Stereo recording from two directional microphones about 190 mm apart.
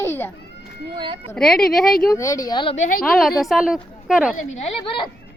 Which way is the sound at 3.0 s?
Centre (ahead or behind).